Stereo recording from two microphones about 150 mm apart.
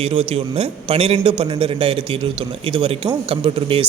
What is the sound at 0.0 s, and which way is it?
A man's voice, 40° right (ahead or behind).